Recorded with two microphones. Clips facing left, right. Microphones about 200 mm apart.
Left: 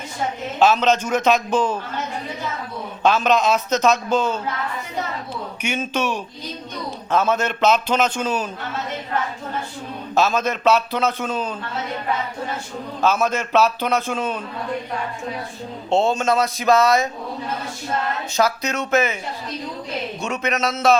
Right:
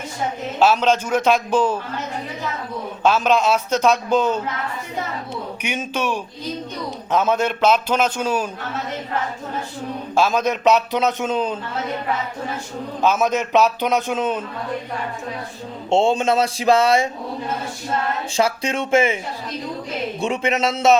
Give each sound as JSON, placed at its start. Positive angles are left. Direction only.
{"t": 0.6, "sound": "a man's voice", "side_deg": -10}
{"t": 3.0, "sound": "a man's voice", "side_deg": -10}
{"t": 5.7, "sound": "a man's voice", "side_deg": -10}
{"t": 10.2, "sound": "a man's voice", "side_deg": -10}
{"t": 13.0, "sound": "a man's voice", "side_deg": -15}
{"t": 15.9, "sound": "speech", "side_deg": -25}
{"t": 18.3, "sound": "speech", "side_deg": -30}
{"t": 20.2, "sound": "speech", "side_deg": -30}